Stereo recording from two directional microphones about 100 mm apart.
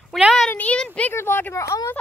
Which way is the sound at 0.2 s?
Centre (ahead or behind).